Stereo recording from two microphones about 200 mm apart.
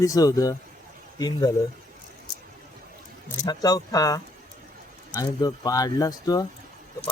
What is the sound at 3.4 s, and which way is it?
Speech, 20° left (ahead or behind).